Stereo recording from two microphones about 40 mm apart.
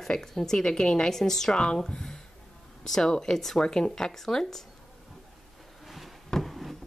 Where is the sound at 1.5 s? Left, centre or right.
Left.